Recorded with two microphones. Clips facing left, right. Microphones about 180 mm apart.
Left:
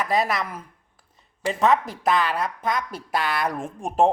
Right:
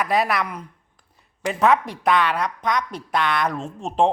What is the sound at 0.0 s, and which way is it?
A woman's voice, centre (ahead or behind).